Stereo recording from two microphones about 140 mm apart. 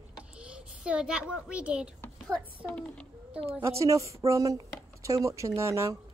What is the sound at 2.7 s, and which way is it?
Speech, 10° left (ahead or behind).